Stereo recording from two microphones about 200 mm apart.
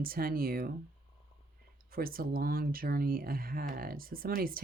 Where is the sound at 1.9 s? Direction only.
45° right (ahead or behind).